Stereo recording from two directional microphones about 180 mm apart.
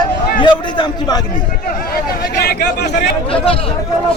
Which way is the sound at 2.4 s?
60° left (ahead or behind).